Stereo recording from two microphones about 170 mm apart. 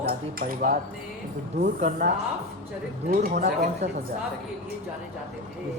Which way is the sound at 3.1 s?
50° right (ahead or behind).